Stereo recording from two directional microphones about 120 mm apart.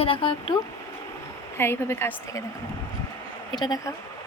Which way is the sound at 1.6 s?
20° left (ahead or behind).